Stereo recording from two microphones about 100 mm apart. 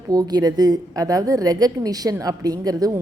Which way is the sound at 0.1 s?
40° right (ahead or behind).